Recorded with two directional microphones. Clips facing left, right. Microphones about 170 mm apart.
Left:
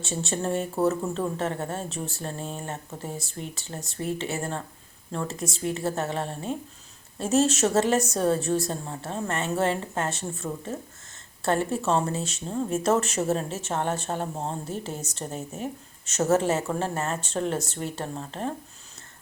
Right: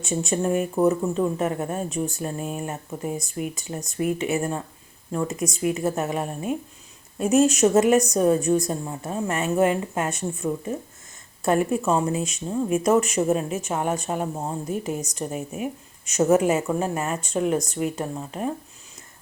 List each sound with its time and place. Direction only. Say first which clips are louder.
0.0 s speech: right 5 dB; 15° right (ahead or behind)